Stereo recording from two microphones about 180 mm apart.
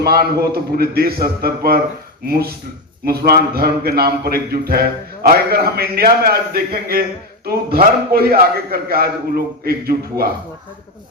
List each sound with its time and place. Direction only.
0.0 s a man's voice: 60° right (ahead or behind)